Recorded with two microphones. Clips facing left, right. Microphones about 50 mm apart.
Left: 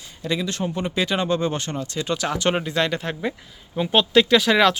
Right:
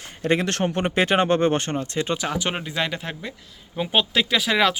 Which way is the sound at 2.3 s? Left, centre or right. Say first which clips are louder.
Left 4 dB; centre.